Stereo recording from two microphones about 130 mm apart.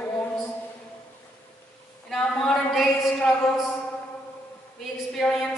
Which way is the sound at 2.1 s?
Centre (ahead or behind).